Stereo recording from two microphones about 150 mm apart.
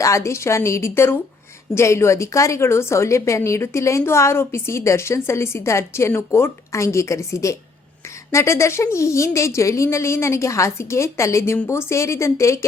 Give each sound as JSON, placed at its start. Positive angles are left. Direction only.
{"t": 0.0, "sound": "a woman's voice", "side_deg": 20}